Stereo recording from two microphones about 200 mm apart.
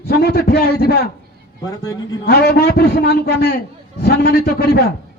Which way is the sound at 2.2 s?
50° left (ahead or behind).